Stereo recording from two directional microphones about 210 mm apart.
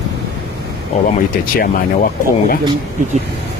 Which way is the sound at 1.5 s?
45° left (ahead or behind).